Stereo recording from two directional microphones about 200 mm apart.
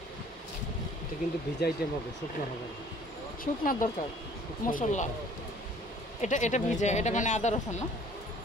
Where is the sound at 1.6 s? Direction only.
50° left (ahead or behind).